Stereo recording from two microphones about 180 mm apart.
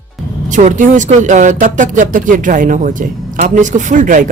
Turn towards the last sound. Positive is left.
turn(degrees=-45)  # may be behind; listen again after turning